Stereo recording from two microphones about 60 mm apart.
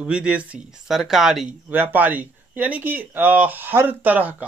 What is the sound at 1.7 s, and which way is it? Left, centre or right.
Speech, right.